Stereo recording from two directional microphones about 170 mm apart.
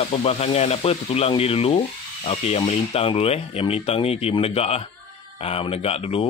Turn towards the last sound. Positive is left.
turn(degrees=35)  # may be behind; listen again after turning